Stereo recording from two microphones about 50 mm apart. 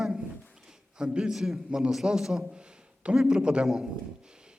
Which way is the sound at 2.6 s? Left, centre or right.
Right.